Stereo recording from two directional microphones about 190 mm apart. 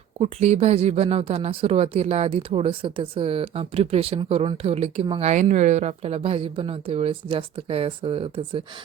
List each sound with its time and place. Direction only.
0.2 s speech: 35° right (ahead or behind)
5.3 s speech: 40° right (ahead or behind)